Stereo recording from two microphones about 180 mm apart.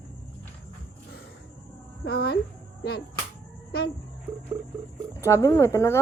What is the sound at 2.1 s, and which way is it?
Speech, 60° left (ahead or behind).